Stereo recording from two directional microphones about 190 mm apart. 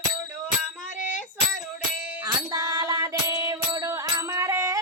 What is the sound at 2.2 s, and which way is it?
Music, 20° right (ahead or behind).